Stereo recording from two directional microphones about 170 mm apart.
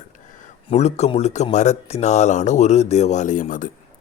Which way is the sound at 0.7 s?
40° left (ahead or behind).